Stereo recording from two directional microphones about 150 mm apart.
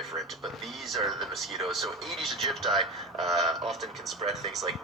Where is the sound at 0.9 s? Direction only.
Centre (ahead or behind).